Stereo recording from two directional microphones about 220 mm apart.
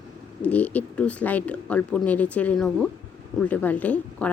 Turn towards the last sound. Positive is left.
turn(degrees=5)  # may be behind; listen again after turning